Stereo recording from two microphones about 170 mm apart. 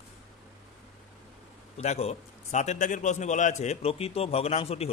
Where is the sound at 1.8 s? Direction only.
40° left (ahead or behind).